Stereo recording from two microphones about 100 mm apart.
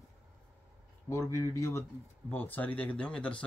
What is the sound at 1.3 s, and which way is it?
Speech, 30° left (ahead or behind).